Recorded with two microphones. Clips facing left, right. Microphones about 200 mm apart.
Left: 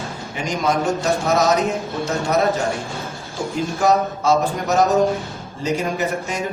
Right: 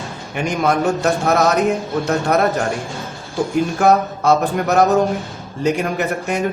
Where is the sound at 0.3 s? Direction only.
60° right (ahead or behind).